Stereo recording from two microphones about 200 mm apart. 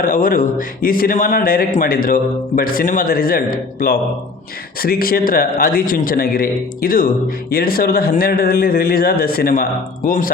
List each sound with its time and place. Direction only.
0.0 s speech: 45° left (ahead or behind)